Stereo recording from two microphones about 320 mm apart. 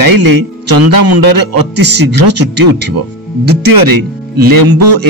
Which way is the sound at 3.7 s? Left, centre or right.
Right.